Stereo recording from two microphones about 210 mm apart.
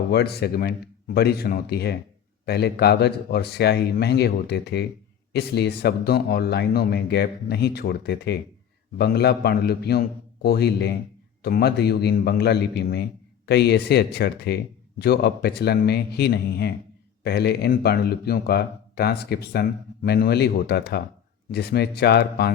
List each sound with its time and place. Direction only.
0.1 s speech: 50° left (ahead or behind)